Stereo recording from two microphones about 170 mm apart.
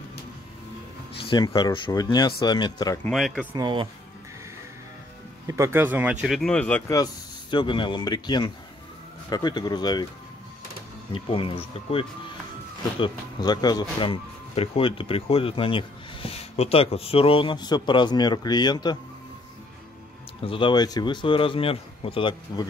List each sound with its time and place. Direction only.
1.2 s speech: 30° left (ahead or behind)
3.1 s speech: centre (ahead or behind)
3.5 s speech: 25° right (ahead or behind)
5.5 s speech: 15° right (ahead or behind); by 6.8 s 5° left (ahead or behind)
7.5 s speech: 30° left (ahead or behind)
11.1 s speech: 30° left (ahead or behind)
20.4 s speech: 30° left (ahead or behind)